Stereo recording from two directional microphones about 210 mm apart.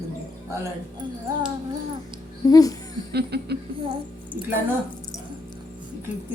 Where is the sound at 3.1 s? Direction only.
50° right (ahead or behind).